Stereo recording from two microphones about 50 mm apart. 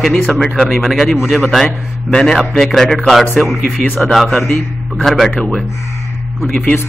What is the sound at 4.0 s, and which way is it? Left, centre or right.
A man's voice, centre.